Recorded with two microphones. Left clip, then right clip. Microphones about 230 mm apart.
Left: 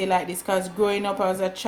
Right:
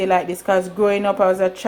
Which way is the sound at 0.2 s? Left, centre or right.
Centre.